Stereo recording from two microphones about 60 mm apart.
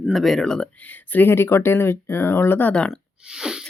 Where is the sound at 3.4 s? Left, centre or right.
Centre.